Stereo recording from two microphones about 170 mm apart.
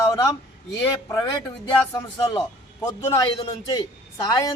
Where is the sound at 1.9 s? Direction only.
25° left (ahead or behind).